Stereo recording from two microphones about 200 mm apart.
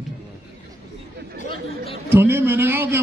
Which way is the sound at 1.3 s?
50° right (ahead or behind).